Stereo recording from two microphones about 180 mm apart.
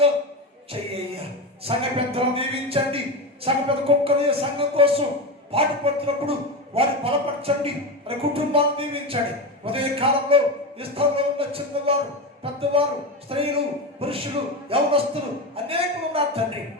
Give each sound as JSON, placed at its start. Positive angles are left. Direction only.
{"t": 0.7, "sound": "music", "side_deg": -30}
{"t": 1.6, "sound": "speech", "side_deg": -30}